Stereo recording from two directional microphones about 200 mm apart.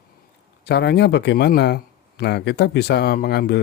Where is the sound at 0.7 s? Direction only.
55° left (ahead or behind).